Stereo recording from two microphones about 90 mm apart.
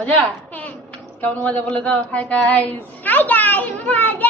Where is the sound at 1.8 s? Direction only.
10° left (ahead or behind).